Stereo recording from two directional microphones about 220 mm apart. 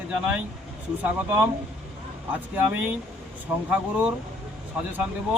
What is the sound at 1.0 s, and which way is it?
Speech, 10° right (ahead or behind).